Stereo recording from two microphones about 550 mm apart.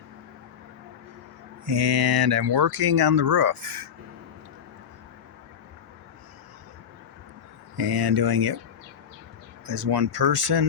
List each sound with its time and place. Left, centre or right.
1.6 s speech: right
7.8 s speech: right
9.6 s speech: right